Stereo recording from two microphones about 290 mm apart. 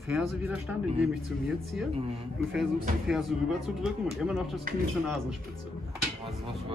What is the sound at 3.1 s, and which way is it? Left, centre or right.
Speech, centre.